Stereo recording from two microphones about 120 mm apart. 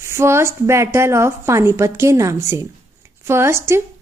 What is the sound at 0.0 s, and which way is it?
A woman's voice, 20° right (ahead or behind).